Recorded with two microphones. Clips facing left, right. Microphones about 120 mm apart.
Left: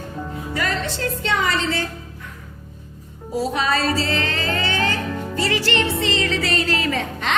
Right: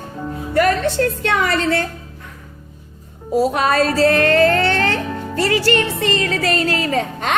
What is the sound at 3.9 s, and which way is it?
Music, 55° right (ahead or behind).